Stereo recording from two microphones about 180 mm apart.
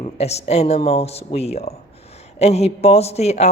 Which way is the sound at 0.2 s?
35° left (ahead or behind).